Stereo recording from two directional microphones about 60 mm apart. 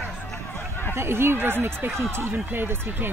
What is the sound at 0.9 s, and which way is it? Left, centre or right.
Speech, right.